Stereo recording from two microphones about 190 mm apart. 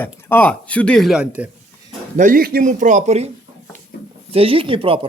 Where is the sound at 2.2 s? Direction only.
50° right (ahead or behind).